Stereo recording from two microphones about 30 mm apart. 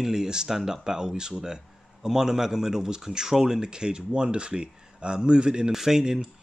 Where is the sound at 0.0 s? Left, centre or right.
Right.